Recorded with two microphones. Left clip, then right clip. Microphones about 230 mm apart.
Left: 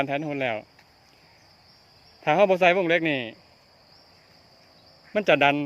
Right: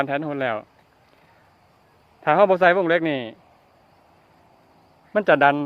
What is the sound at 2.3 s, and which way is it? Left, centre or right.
A man's voice, centre.